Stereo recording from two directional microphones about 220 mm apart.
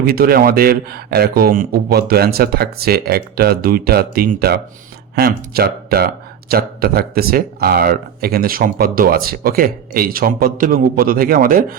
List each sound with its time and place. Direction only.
0.0 s speech: 45° right (ahead or behind)